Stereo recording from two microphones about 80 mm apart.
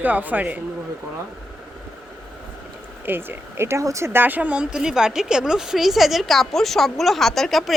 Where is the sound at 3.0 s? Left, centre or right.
Right.